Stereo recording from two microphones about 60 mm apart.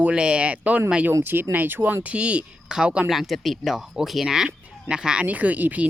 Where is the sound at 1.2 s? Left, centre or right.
Right; by 3.0 s centre.